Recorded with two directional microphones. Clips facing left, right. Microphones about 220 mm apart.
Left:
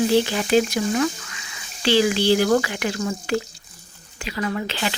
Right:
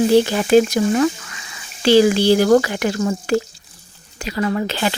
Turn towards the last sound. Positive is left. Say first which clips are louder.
# right 5 dB
turn(degrees=-45)  # may be behind; listen again after turning